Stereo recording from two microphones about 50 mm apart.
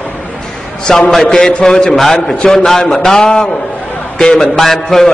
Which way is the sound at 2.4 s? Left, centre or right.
Centre.